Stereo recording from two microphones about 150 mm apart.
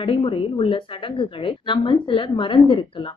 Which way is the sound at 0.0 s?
35° left (ahead or behind).